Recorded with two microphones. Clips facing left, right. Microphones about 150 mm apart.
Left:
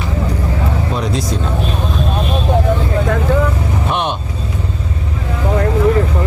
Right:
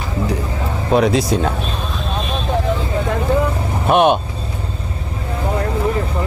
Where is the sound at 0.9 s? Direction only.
65° right (ahead or behind).